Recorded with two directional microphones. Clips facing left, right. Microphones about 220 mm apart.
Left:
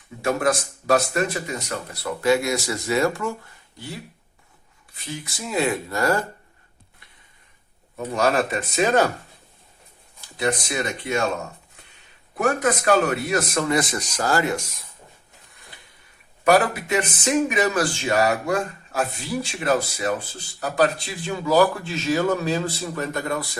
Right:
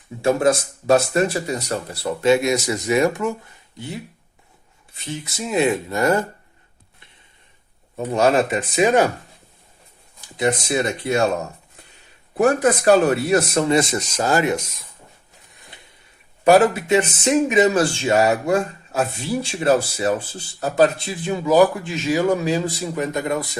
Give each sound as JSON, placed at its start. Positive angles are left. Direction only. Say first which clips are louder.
{"t": 0.2, "sound": "speech", "louder": "right 5 dB", "side_deg": -25}
{"t": 7.9, "sound": "speech", "louder": "right 4 dB", "side_deg": -25}
{"t": 10.2, "sound": "speech", "louder": "right 3 dB", "side_deg": -20}
{"t": 10.8, "sound": "speech", "louder": "right 5 dB", "side_deg": -35}
{"t": 12.4, "sound": "speech", "louder": "right 5 dB", "side_deg": -30}
{"t": 16.4, "sound": "speech", "louder": "right 5 dB", "side_deg": -25}